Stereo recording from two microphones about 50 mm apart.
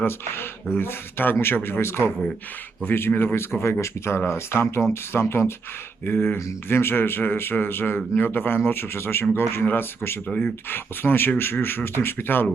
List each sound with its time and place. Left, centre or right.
0.8 s speech: left
2.8 s speech: left
6.1 s speech: left
10.2 s speech: left
10.7 s speech: left